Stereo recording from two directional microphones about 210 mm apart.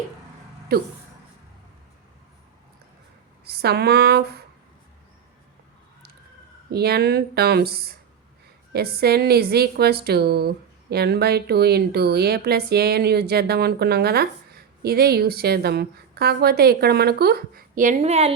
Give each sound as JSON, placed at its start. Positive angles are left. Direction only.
{"t": 0.7, "sound": "a woman's voice", "side_deg": -45}
{"t": 3.4, "sound": "speech", "side_deg": -50}
{"t": 6.7, "sound": "a woman's voice", "side_deg": -50}